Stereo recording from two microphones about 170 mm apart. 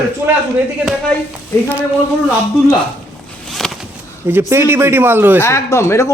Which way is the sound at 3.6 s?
Centre (ahead or behind).